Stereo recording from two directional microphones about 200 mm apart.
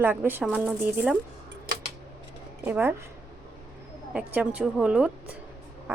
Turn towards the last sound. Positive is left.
turn(degrees=-5)  # may be behind; listen again after turning